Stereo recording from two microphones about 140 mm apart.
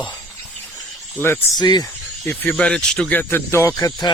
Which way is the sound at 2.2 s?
10° left (ahead or behind).